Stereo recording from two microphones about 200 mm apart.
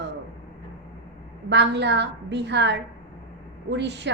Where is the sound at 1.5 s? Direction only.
60° right (ahead or behind).